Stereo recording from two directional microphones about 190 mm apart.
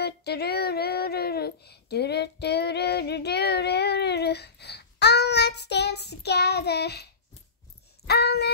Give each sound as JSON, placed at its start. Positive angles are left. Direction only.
{"t": 0.0, "sound": "child singing", "side_deg": 60}
{"t": 8.1, "sound": "speech", "side_deg": 60}